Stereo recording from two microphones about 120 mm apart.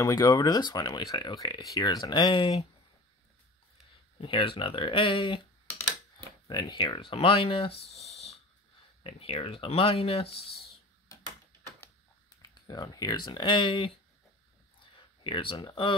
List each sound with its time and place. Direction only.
0.0 s speech: 30° left (ahead or behind)
4.2 s speech: 45° left (ahead or behind)
6.4 s speech: 40° left (ahead or behind); by 8.4 s 60° left (ahead or behind)
9.0 s speech: 50° left (ahead or behind)
12.4 s speech: 35° left (ahead or behind)
15.2 s speech: 45° left (ahead or behind)